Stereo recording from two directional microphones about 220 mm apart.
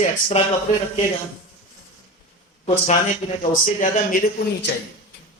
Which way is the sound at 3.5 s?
35° left (ahead or behind).